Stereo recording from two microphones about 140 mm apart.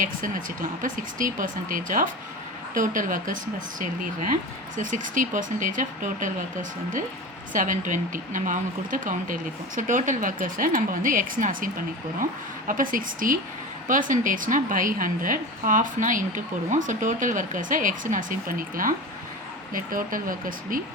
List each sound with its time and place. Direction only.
0.0 s a woman's voice: 80° right